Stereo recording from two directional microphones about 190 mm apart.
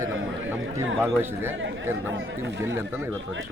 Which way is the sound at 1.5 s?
80° right.